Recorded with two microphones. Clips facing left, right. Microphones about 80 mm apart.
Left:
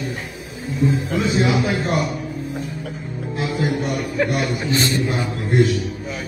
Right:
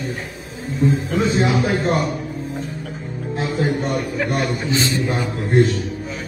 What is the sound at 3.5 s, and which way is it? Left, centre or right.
A man's voice, right.